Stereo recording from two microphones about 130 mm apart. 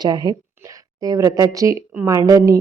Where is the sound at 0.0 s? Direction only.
30° right (ahead or behind).